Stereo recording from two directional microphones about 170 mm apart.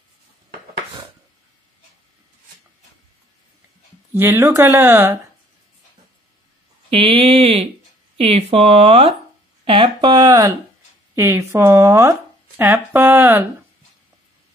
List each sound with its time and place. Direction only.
4.1 s speech: 15° right (ahead or behind)
6.9 s a sound: 30° right (ahead or behind)
8.2 s speech: 35° right (ahead or behind); by 13.5 s 10° right (ahead or behind)